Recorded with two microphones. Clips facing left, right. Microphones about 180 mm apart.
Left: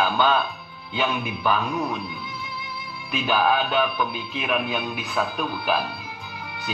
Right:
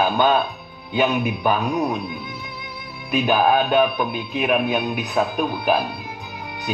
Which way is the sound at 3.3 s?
45° right (ahead or behind).